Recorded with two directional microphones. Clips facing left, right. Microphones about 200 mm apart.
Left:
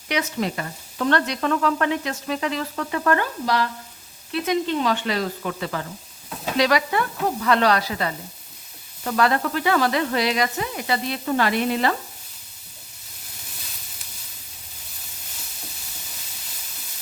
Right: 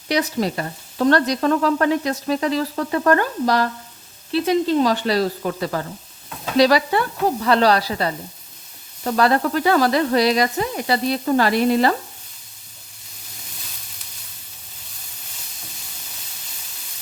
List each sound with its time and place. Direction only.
0.1 s stir: 35° right (ahead or behind)
4.3 s stir: 30° right (ahead or behind)